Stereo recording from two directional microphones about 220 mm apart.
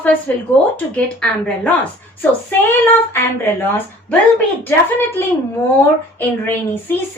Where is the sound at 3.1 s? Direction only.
10° left (ahead or behind).